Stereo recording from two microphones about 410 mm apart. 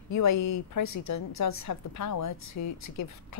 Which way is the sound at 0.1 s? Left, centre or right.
Left.